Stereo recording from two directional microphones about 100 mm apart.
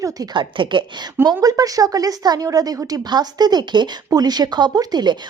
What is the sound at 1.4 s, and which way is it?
Speech, 40° right (ahead or behind).